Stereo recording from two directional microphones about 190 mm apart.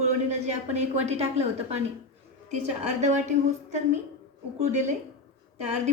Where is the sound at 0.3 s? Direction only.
35° right (ahead or behind).